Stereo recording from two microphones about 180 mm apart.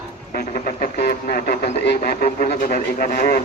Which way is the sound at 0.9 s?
60° left (ahead or behind).